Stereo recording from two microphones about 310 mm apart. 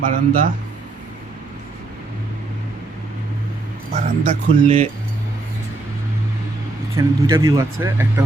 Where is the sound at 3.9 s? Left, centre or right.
Right.